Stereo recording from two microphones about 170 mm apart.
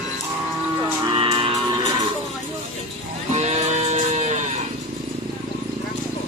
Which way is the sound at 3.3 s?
40° right (ahead or behind).